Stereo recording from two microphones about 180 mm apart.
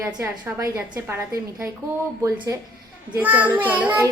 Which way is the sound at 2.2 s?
20° right (ahead or behind).